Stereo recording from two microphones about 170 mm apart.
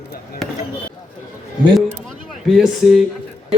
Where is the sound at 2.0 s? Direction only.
Centre (ahead or behind).